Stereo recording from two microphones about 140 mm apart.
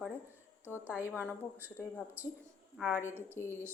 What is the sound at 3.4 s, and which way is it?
Speech, 15° left (ahead or behind).